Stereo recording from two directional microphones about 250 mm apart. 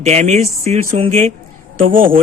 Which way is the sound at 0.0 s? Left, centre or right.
Right.